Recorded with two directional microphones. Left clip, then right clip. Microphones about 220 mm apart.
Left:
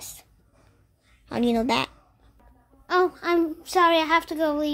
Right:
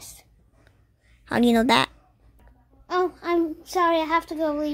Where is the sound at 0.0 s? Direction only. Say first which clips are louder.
Left 3 dB; 20° left (ahead or behind).